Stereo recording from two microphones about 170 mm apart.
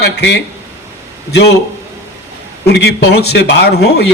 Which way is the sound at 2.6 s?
80° left.